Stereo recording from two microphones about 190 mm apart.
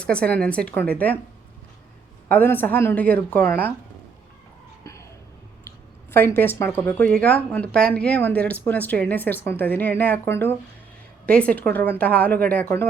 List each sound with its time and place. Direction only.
0.0 s speech: 5° left (ahead or behind)
2.3 s speech: 10° left (ahead or behind)
4.8 s a sound: 15° left (ahead or behind)
5.6 s speech: 10° left (ahead or behind)